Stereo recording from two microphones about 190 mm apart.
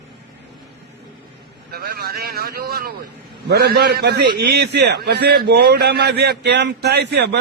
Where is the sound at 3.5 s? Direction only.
55° right (ahead or behind).